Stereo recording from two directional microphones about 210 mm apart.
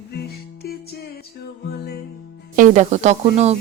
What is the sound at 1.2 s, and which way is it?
Music, 50° left (ahead or behind).